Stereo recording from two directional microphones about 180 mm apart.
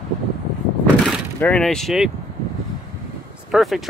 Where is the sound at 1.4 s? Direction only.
5° left (ahead or behind).